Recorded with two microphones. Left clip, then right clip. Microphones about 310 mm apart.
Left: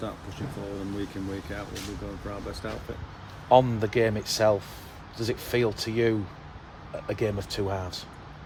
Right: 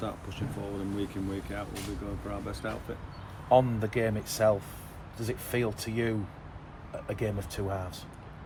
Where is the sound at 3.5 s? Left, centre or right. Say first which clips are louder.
Left 4 dB; left.